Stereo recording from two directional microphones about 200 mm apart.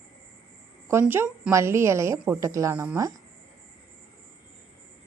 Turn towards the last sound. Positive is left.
turn(degrees=-15)  # may be behind; listen again after turning